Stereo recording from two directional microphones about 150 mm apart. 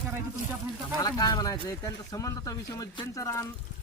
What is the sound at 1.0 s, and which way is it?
Speech, 25° left (ahead or behind).